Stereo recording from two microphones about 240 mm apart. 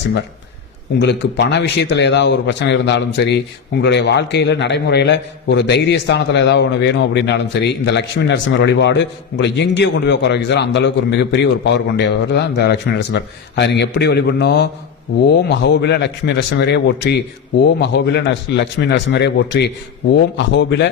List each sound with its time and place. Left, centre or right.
0.9 s speech: left